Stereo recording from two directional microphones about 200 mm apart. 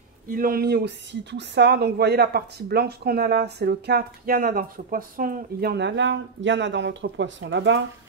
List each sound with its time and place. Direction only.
0.3 s speech: 45° right (ahead or behind); by 7.8 s 65° right (ahead or behind)